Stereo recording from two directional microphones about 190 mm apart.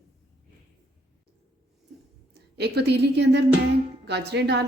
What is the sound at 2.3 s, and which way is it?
A woman's voice, 60° right (ahead or behind).